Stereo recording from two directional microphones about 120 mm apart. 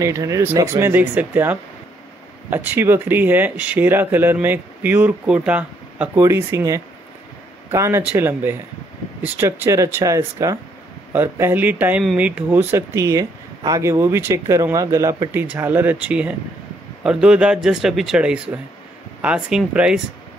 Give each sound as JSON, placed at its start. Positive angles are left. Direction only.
{"t": 0.0, "sound": "speech", "side_deg": -25}
{"t": 6.2, "sound": "speech", "side_deg": -25}